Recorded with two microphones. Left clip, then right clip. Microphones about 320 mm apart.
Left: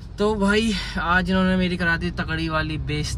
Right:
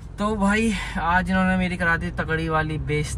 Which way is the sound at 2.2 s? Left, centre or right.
Right.